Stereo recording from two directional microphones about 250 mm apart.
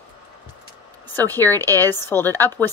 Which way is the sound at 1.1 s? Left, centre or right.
Centre.